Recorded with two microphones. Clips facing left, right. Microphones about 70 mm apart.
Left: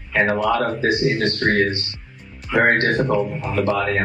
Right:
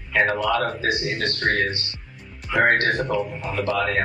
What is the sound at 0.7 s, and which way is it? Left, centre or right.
Speech, left.